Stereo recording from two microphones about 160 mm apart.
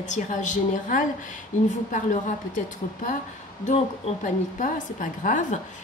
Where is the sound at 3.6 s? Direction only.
50° left (ahead or behind).